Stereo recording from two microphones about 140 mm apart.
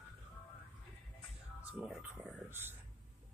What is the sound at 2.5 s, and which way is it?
Speech, 15° right (ahead or behind).